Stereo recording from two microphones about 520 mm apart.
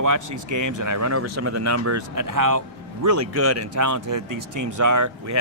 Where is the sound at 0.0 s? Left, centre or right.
Right.